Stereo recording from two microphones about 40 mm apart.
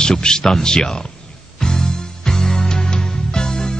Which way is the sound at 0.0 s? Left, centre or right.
Centre.